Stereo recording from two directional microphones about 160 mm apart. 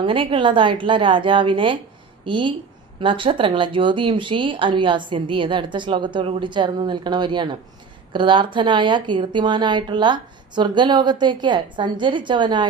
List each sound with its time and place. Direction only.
0.0 s speech: 35° right (ahead or behind)